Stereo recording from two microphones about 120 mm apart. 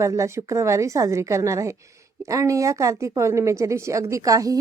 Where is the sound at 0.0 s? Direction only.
25° right (ahead or behind).